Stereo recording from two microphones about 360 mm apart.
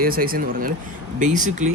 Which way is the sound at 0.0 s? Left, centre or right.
Right.